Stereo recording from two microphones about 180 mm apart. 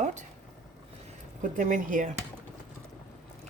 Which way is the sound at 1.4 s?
45° right (ahead or behind).